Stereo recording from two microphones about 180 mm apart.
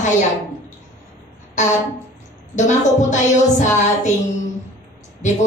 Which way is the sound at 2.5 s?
40° left (ahead or behind).